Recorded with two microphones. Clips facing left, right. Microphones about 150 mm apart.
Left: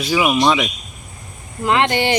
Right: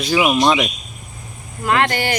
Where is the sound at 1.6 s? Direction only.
20° left (ahead or behind).